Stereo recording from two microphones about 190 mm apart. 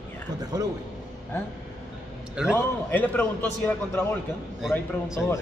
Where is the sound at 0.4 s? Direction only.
20° right (ahead or behind).